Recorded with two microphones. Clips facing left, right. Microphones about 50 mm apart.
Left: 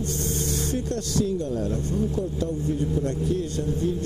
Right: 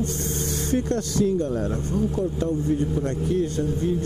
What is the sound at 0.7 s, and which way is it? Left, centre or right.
Music, right.